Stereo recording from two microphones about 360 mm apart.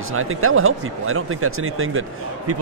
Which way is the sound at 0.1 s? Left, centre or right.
Right.